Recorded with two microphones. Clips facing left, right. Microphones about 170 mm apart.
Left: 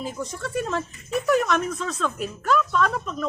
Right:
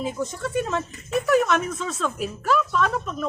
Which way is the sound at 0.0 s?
Centre (ahead or behind).